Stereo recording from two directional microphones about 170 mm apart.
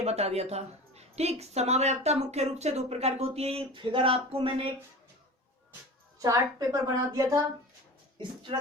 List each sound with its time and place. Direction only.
0.0 s a woman's voice: 40° right (ahead or behind)
6.1 s a woman's voice: 20° right (ahead or behind)